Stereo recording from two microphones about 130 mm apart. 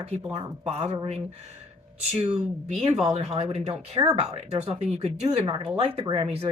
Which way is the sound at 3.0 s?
50° right (ahead or behind).